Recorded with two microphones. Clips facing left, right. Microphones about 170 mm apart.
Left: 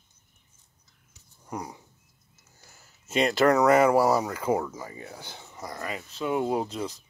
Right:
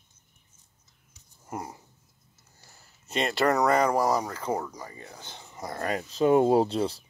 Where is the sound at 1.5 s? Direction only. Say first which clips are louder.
Left 1 dB; 5° right (ahead or behind).